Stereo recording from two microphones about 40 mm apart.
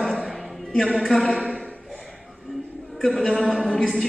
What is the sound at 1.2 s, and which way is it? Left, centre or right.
Speech, left.